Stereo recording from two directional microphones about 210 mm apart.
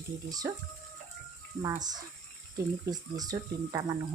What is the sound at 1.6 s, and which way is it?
Speech, 15° right (ahead or behind).